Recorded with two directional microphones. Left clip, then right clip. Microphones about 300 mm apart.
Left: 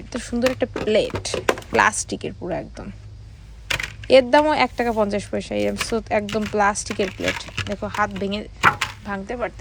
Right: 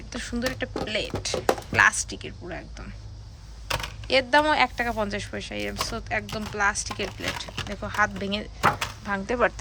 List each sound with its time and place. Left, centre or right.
0.1 s speech: centre
4.0 s speech: centre